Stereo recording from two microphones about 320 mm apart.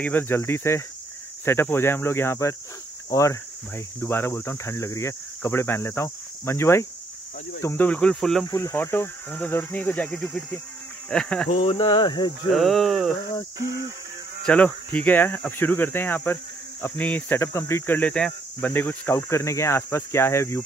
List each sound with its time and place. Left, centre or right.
0.0 s speech: centre
11.5 s speech: centre
12.4 s speech: centre
14.4 s speech: centre